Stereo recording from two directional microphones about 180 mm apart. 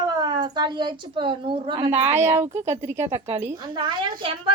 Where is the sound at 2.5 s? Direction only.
40° right (ahead or behind).